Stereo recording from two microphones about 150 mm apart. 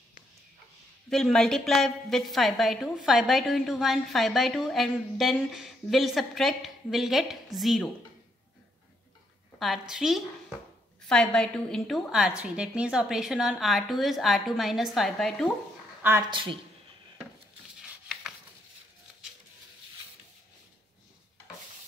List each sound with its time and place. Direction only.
1.1 s a woman's voice: 5° left (ahead or behind)
9.6 s a woman's voice: centre (ahead or behind)
16.0 s speech: 15° right (ahead or behind)
16.3 s speech: 35° right (ahead or behind)